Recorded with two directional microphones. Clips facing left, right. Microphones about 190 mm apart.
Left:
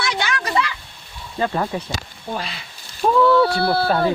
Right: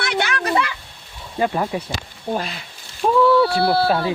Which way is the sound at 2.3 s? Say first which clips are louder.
Right 4 dB; 45° right (ahead or behind).